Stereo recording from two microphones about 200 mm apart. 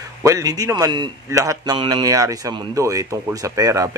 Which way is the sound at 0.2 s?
15° right (ahead or behind).